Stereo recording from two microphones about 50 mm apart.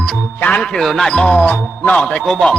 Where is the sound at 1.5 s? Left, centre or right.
Left.